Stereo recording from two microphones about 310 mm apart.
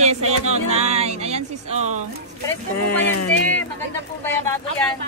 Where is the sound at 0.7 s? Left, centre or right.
Centre.